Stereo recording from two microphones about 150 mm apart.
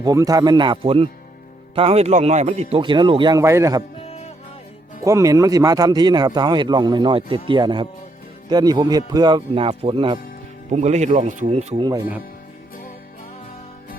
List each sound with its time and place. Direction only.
0.0 s a man's voice: 25° right (ahead or behind)
3.4 s a man's voice: 20° right (ahead or behind)
5.0 s a man's voice: 20° right (ahead or behind)
10.7 s speech: 50° right (ahead or behind)